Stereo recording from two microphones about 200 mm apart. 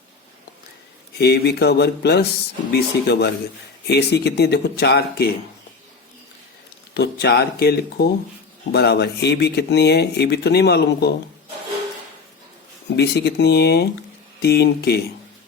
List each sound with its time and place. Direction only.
1.2 s speech: 55° left (ahead or behind)
6.9 s speech: 55° left (ahead or behind)
13.0 s speech: 55° left (ahead or behind)